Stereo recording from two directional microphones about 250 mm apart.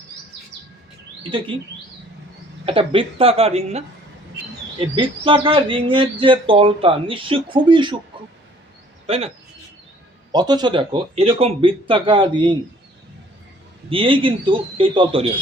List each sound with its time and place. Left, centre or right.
2.6 s speech: right
9.0 s speech: right
10.3 s speech: centre
13.9 s speech: right